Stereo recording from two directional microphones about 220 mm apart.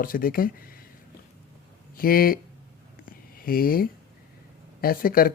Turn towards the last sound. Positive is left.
turn(degrees=40)  # may be behind; listen again after turning